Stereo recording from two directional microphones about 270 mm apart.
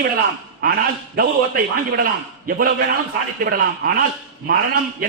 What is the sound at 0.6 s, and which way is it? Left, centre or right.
A man's voice, right.